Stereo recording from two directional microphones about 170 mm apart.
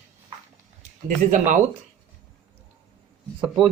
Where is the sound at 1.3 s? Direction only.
50° right (ahead or behind).